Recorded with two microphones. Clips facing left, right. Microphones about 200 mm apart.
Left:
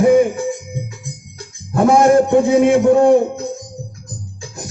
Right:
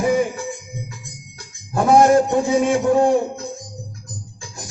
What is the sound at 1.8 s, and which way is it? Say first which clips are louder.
A man's voice: left 2 dB; 55° left (ahead or behind).